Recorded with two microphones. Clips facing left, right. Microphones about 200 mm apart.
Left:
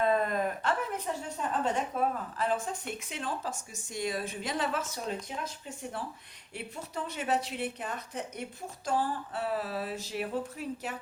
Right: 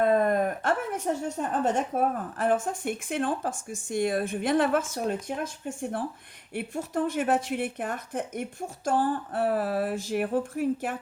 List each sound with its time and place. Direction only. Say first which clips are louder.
0.0 s speech: right 5 dB; 55° right (ahead or behind)